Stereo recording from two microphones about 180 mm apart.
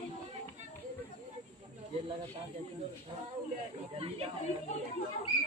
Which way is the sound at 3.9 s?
35° right (ahead or behind).